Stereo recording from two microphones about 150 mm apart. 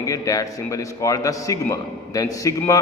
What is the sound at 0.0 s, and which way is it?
A man's voice, 25° left (ahead or behind).